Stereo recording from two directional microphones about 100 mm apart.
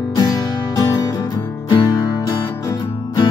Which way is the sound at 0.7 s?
35° left (ahead or behind).